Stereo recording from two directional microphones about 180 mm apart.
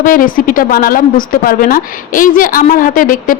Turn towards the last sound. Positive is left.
turn(degrees=50)  # may be behind; listen again after turning